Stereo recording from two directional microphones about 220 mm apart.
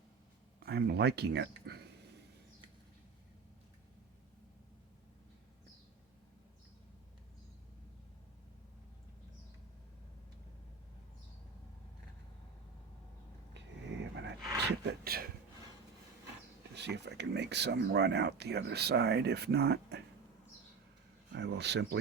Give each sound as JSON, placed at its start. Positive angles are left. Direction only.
{"t": 0.6, "sound": "speech", "side_deg": -45}
{"t": 13.5, "sound": "a sound", "side_deg": -55}
{"t": 16.7, "sound": "speech", "side_deg": -50}
{"t": 21.3, "sound": "speech", "side_deg": -50}